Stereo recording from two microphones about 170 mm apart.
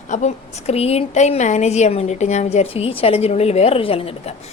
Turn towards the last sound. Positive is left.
turn(degrees=35)  # may be behind; listen again after turning